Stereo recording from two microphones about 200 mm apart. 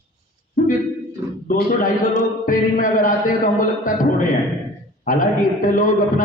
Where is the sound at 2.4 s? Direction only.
40° left (ahead or behind).